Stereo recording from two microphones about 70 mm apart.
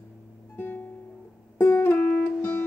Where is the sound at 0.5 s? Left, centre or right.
Left.